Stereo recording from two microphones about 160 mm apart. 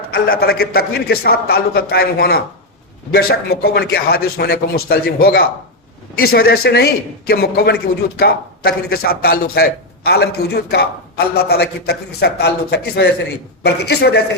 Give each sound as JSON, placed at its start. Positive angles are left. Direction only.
{"t": 0.1, "sound": "a man's voice", "side_deg": 75}